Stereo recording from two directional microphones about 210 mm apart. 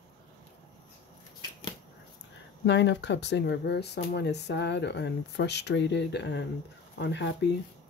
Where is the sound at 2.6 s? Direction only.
55° left (ahead or behind).